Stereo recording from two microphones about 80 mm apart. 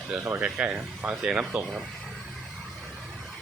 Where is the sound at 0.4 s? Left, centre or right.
Centre.